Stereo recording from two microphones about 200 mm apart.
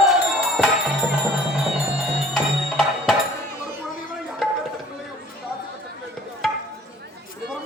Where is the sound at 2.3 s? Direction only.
Centre (ahead or behind).